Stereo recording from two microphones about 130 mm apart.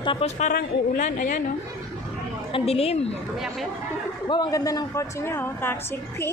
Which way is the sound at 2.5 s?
50° left (ahead or behind).